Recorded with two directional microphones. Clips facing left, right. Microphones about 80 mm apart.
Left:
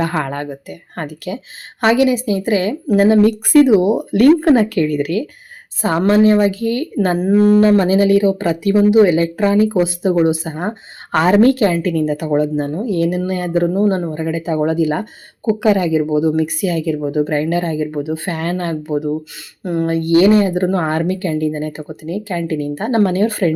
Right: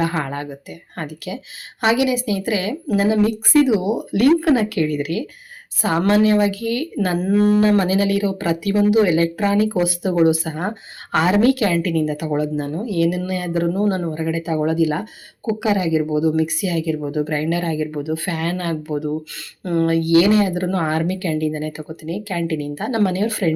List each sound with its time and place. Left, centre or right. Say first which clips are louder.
0.0 s speech: left 3 dB; left
11.1 s speech: left 4 dB; left
13.7 s speech: left 4 dB; left
14.1 s speech: left 2 dB; left